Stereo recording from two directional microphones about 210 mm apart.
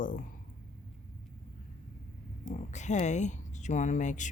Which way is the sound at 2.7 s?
35° left (ahead or behind).